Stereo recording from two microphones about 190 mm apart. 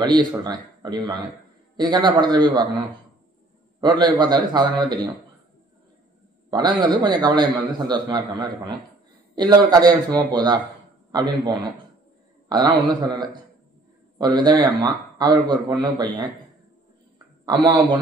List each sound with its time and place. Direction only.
0.0 s a man's voice: 20° right (ahead or behind)
3.8 s a man's voice: 20° right (ahead or behind)
6.5 s a man's voice: 20° right (ahead or behind)
12.4 s a man's voice: 20° right (ahead or behind)
17.5 s a man's voice: 20° right (ahead or behind)